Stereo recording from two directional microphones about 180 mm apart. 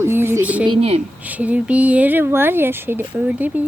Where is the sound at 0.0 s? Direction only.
15° right (ahead or behind).